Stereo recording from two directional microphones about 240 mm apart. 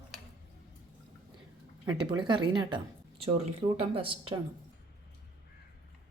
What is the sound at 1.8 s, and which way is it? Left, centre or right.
Speech, centre.